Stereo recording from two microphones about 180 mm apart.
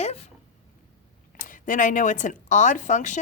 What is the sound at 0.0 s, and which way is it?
Speech, 35° left (ahead or behind).